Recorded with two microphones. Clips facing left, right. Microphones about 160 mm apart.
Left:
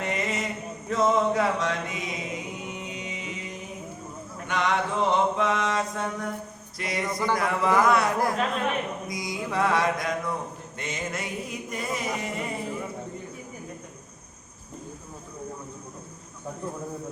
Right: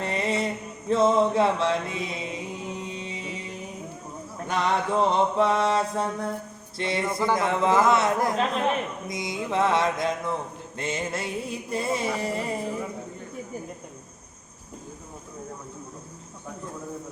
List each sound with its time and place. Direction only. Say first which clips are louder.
0.0 s mantra: right 3 dB; 30° right (ahead or behind)
4.4 s mantra: right 1 dB; 35° right (ahead or behind)